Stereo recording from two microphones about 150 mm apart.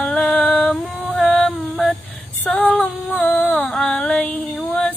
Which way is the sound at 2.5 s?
5° left (ahead or behind).